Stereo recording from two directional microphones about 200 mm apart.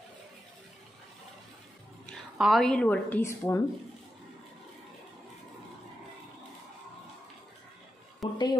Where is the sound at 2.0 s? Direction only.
Centre (ahead or behind).